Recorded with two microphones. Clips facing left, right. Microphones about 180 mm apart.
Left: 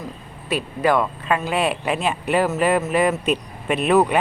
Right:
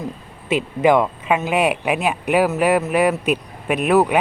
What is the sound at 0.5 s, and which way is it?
Speech, 20° right (ahead or behind).